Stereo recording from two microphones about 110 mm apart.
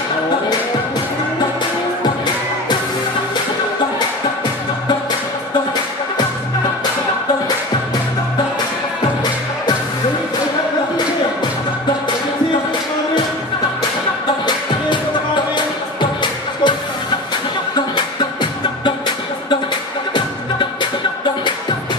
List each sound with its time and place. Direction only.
15.5 s music: 45° left (ahead or behind)
17.7 s music: 45° left (ahead or behind)